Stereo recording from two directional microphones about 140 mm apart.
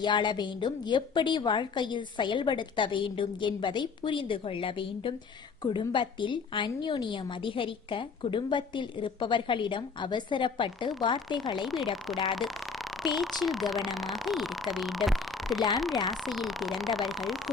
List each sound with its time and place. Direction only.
0.0 s a woman's voice: 35° left (ahead or behind)
11.6 s speech: centre (ahead or behind)